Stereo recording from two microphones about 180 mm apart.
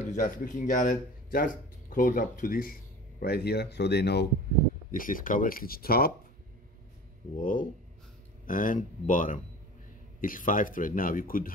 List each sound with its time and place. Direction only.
0.0 s speech: 45° left (ahead or behind)
3.2 s speech: 60° left (ahead or behind)
4.9 s speech: 50° left (ahead or behind)
7.3 s speech: 50° left (ahead or behind)